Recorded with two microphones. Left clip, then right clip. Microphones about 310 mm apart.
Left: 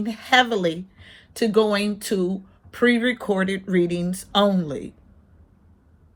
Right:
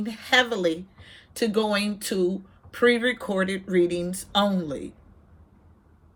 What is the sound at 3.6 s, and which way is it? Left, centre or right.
Speech, left.